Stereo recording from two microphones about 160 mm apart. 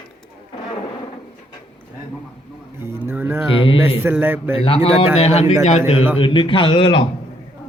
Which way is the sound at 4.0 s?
10° right (ahead or behind).